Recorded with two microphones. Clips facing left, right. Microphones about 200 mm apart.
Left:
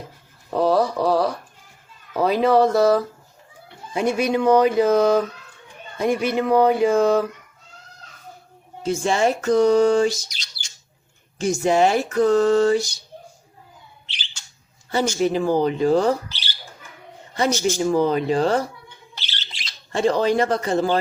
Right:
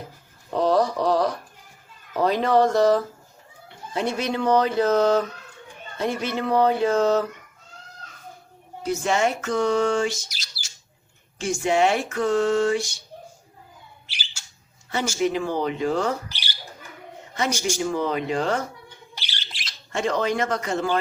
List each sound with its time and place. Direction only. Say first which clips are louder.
0.5 s speech: left 2 dB; 5° left (ahead or behind)
2.1 s a sound: left 3 dB; 10° left (ahead or behind)
8.8 s speech: left 2 dB; 30° left (ahead or behind)
10.2 s bird: left 1 dB; 5° right (ahead or behind)
11.3 s speech: left 3 dB; 40° left (ahead or behind)
14.1 s bird: left 1 dB; 10° right (ahead or behind)
15.2 s speech: left 4 dB; 35° left (ahead or behind)
16.3 s a sound: left 1 dB; 15° right (ahead or behind)
17.5 s speech: left 5 dB; 15° right (ahead or behind)
17.9 s speech: left 5 dB; 35° left (ahead or behind)
19.1 s squawk: left 2 dB; 15° right (ahead or behind)
19.5 s squawk: even; centre (ahead or behind)
19.9 s speech: left 5 dB; 35° left (ahead or behind)